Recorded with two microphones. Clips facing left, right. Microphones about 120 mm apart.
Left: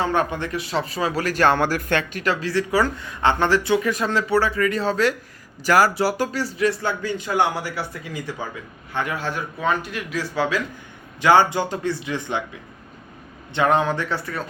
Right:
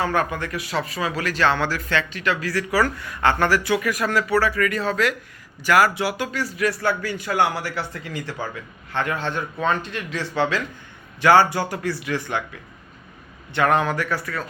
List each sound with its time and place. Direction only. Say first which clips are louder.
0.0 s speech: left 1 dB; 25° left (ahead or behind)
13.5 s speech: left 1 dB; 20° left (ahead or behind)